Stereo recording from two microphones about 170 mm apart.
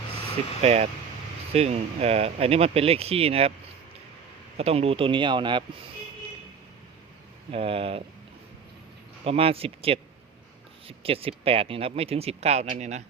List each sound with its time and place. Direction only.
0.6 s speech: 40° right (ahead or behind)
4.5 s speech: 35° right (ahead or behind)
7.5 s speech: 35° right (ahead or behind)
9.2 s speech: 35° right (ahead or behind)